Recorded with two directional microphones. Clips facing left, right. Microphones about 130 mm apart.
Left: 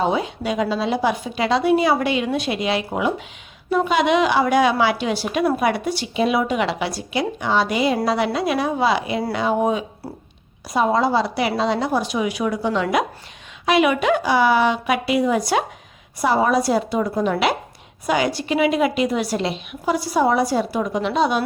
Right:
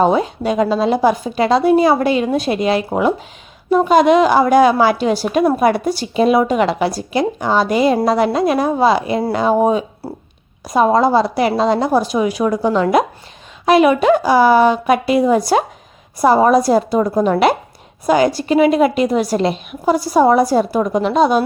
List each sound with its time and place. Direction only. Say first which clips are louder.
0.0 s a woman's voice: right 6 dB; 45° right (ahead or behind)